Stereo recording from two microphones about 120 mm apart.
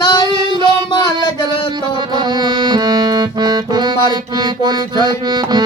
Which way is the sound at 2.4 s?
35° right (ahead or behind).